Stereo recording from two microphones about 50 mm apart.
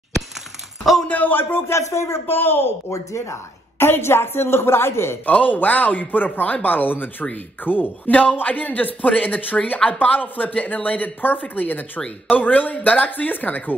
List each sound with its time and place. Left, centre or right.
1.0 s speech: left
1.7 s speech: left
2.2 s a woman's voice: left
2.9 s speech: left
3.7 s a woman's voice: left
5.2 s speech: left